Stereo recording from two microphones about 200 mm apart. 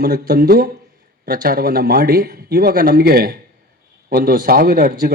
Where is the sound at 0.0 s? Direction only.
45° right (ahead or behind).